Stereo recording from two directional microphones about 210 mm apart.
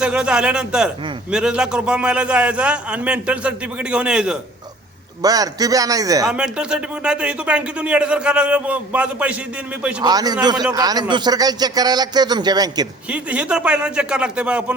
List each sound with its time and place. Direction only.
0.0 s speech: 5° right (ahead or behind)
5.2 s a man's voice: 15° right (ahead or behind)
6.2 s speech: 5° right (ahead or behind)
10.0 s a man's voice: 20° right (ahead or behind)
13.1 s speech: 5° right (ahead or behind)